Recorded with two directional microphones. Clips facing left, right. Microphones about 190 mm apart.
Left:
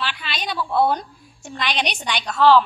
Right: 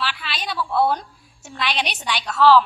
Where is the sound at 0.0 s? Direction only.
5° right (ahead or behind).